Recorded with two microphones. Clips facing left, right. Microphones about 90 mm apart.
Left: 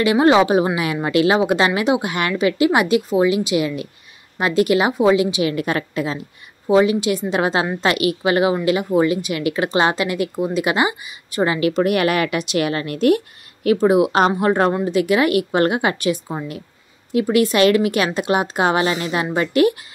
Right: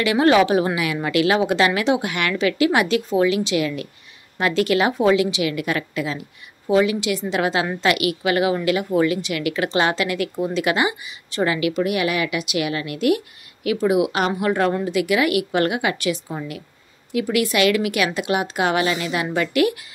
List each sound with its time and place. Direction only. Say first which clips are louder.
0.0 s a woman's voice: left 2 dB; 25° left (ahead or behind)
11.8 s a woman's voice: left 6 dB; 50° left (ahead or behind); by 14.7 s 35° left (ahead or behind)
14.7 s a woman's voice: left 3 dB; 20° left (ahead or behind)
15.0 s a woman's voice: left 3 dB; 35° left (ahead or behind)